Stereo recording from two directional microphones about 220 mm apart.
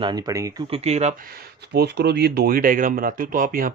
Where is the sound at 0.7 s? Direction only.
30° right (ahead or behind).